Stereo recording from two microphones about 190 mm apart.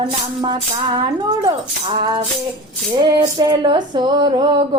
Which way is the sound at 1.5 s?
20° right (ahead or behind).